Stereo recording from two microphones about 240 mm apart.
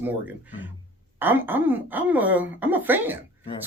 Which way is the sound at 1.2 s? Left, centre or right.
Centre.